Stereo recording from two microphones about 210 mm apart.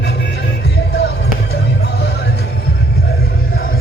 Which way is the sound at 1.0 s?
50° left (ahead or behind).